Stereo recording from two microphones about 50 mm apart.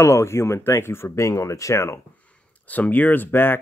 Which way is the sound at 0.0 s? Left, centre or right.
Left.